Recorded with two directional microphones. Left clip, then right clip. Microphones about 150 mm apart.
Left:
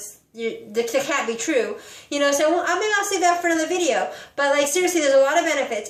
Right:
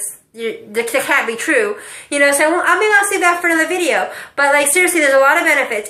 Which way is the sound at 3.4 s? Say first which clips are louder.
Right 6 dB; 45° left (ahead or behind).